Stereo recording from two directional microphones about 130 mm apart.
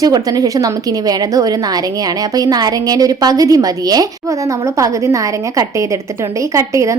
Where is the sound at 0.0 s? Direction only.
30° right (ahead or behind).